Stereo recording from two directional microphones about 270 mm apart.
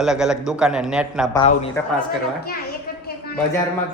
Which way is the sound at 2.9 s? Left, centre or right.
Left.